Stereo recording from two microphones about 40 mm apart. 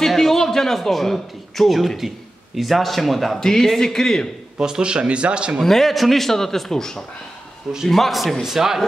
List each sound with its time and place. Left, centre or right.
0.0 s a man's voice: centre
4.6 s speech: centre
5.6 s speech: centre
7.9 s a man's voice: centre
8.4 s speech: centre